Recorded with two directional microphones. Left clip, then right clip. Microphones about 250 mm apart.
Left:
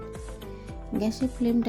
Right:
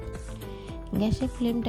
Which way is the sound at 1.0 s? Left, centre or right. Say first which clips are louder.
Even; right.